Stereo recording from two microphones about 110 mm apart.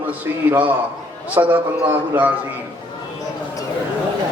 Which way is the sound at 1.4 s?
15° right (ahead or behind).